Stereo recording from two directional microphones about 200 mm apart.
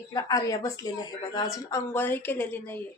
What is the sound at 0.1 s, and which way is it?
A woman's voice, 15° left (ahead or behind).